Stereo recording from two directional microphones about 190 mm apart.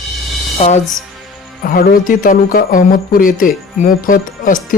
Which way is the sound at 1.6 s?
45° left (ahead or behind).